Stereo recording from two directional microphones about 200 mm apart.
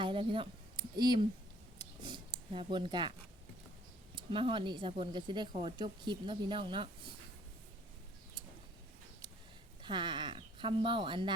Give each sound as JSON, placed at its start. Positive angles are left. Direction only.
{"t": 0.0, "sound": "speech", "side_deg": -25}
{"t": 1.8, "sound": "a sound", "side_deg": -20}
{"t": 4.1, "sound": "speech", "side_deg": -25}
{"t": 9.8, "sound": "speech", "side_deg": -25}